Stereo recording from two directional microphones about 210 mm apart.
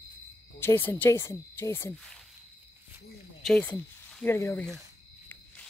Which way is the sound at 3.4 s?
5° left (ahead or behind).